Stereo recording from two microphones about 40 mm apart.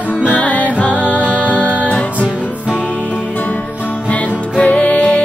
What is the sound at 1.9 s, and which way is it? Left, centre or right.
Music, left.